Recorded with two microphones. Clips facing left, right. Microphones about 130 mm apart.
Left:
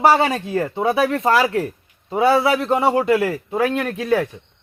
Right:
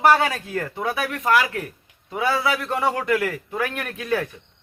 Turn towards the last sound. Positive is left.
turn(degrees=25)  # may be behind; listen again after turning